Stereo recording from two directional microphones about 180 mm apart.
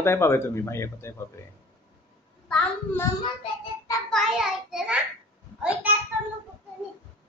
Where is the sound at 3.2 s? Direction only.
25° left (ahead or behind).